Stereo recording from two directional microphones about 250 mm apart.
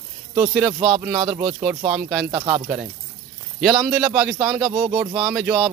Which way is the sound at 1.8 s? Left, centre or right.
Centre.